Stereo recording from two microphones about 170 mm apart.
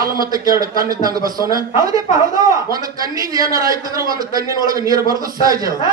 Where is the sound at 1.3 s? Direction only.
20° right (ahead or behind).